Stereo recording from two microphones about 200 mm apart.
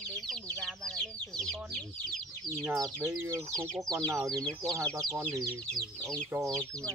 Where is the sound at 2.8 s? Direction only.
15° right (ahead or behind).